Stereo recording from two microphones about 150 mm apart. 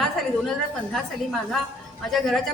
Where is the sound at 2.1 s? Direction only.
Centre (ahead or behind).